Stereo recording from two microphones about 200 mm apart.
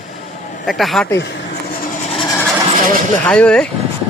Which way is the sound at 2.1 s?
25° left (ahead or behind).